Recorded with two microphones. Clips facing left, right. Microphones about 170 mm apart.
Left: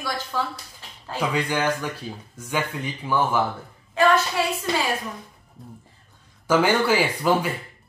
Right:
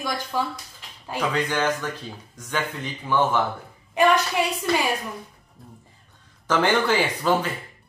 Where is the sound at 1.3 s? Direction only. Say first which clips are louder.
Even; 10° left (ahead or behind).